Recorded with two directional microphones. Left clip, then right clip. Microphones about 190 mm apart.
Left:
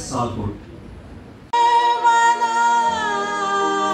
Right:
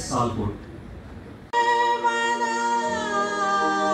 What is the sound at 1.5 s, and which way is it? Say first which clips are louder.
Music: left 5 dB; 15° left (ahead or behind).